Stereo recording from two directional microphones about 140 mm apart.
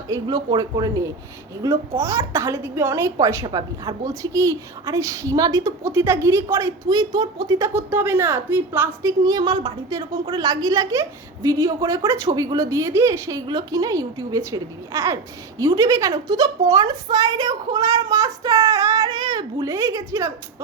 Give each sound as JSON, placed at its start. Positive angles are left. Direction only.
{"t": 0.1, "sound": "speech", "side_deg": -30}
{"t": 7.7, "sound": "a woman's voice", "side_deg": -15}